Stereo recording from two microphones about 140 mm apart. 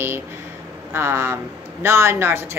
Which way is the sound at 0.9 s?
15° right (ahead or behind).